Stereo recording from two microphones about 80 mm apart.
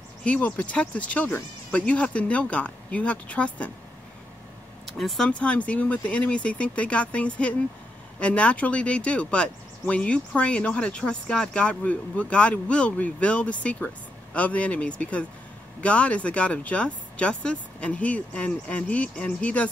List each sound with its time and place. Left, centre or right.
0.2 s speech: centre
4.8 s speech: centre
5.4 s speech: centre